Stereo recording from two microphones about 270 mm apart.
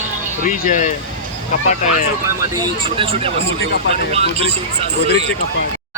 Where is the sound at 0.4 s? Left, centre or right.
Left.